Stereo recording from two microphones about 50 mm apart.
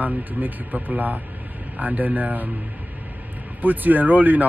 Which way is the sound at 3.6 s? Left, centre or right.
Right.